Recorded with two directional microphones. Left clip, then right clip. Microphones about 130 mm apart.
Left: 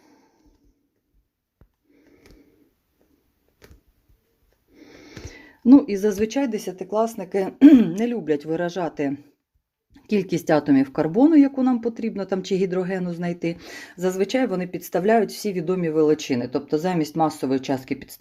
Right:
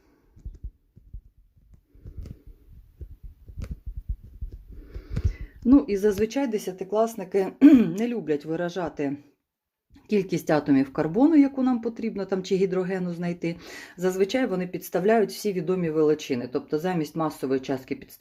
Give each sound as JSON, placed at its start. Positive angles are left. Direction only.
{"t": 5.2, "sound": "speech", "side_deg": 20}